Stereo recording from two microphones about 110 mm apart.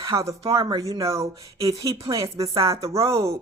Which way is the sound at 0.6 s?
45° right (ahead or behind).